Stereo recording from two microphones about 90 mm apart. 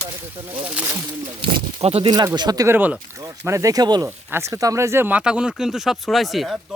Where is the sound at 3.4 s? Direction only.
35° right (ahead or behind).